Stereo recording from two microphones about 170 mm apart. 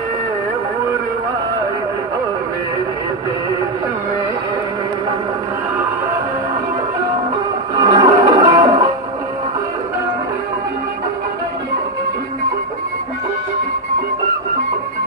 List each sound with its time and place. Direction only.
7.7 s music: 25° right (ahead or behind)